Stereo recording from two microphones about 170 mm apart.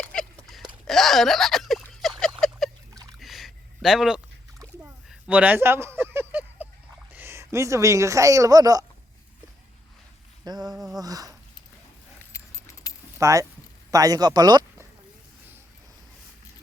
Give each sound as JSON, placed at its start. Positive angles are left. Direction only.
{"t": 0.0, "sound": "a sound", "side_deg": 5}
{"t": 7.1, "sound": "speech", "side_deg": -15}
{"t": 10.4, "sound": "a sound", "side_deg": -25}
{"t": 10.7, "sound": "speech", "side_deg": 0}
{"t": 10.9, "sound": "speech", "side_deg": -20}
{"t": 12.2, "sound": "keys jangling", "side_deg": 15}
{"t": 13.1, "sound": "speech", "side_deg": -15}